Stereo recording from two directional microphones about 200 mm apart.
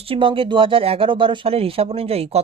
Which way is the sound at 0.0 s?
25° right (ahead or behind).